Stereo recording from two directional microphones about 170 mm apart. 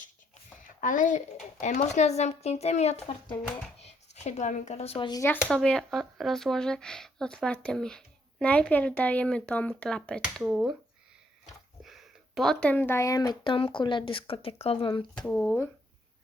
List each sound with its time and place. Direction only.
0.6 s a sound: 50° left (ahead or behind)
1.6 s speech: 45° left (ahead or behind); by 5.2 s 25° left (ahead or behind)
5.2 s speech: 10° left (ahead or behind)
11.8 s speech: centre (ahead or behind); by 15.0 s 30° left (ahead or behind)
15.3 s speech: 10° left (ahead or behind)